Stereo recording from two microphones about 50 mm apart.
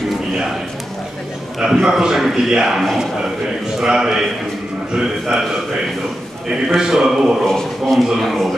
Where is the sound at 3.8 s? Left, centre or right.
Centre.